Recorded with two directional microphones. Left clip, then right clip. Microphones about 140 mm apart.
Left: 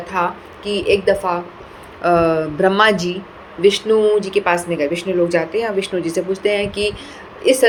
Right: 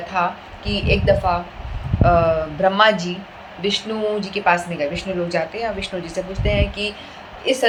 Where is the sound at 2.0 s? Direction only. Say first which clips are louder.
Left 2 dB; 40° left (ahead or behind).